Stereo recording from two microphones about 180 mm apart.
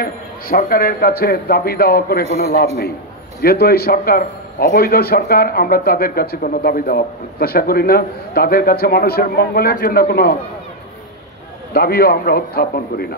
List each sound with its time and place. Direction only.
0.0 s a man's voice: 55° left (ahead or behind)
3.3 s a man's voice: 60° left (ahead or behind)
11.7 s a man's voice: 60° left (ahead or behind)